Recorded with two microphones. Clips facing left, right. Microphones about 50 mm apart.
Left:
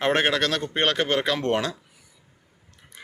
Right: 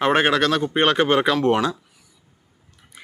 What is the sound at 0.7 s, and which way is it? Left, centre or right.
Speech, centre.